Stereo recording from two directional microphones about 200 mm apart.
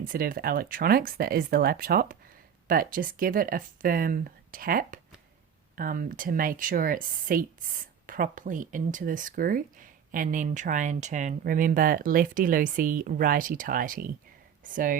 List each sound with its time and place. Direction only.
0.0 s speech: 45° right (ahead or behind)